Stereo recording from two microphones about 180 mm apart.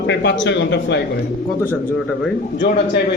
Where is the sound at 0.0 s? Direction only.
80° left.